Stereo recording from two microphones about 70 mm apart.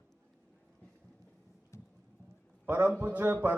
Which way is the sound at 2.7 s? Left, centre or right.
Right.